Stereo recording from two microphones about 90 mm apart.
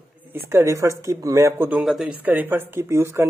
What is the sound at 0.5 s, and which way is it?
Speech, 30° right (ahead or behind).